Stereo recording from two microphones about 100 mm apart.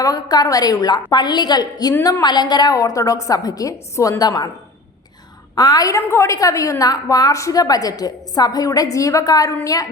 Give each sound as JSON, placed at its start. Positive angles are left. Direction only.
{"t": 0.0, "sound": "a woman's voice", "side_deg": 40}
{"t": 2.2, "sound": "a woman's voice", "side_deg": 45}
{"t": 5.5, "sound": "a woman's voice", "side_deg": 40}
{"t": 6.0, "sound": "a woman's voice", "side_deg": 25}